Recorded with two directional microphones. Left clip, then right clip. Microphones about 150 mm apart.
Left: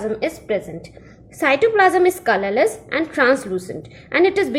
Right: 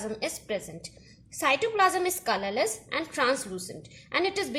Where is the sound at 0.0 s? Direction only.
15° right (ahead or behind).